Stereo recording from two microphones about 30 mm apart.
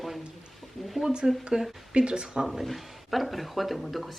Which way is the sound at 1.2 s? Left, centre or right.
Right.